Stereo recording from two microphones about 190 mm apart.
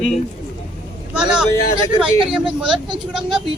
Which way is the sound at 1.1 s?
5° right (ahead or behind).